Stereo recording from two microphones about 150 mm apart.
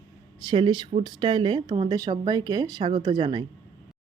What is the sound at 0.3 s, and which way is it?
Speech, 30° right (ahead or behind).